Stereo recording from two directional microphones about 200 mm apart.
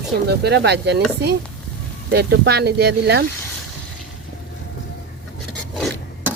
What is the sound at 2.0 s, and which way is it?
Speech, 55° right (ahead or behind).